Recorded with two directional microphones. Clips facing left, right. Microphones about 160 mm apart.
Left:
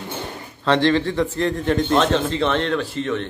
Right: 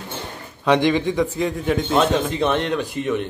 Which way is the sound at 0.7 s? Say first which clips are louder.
Even; 15° right (ahead or behind).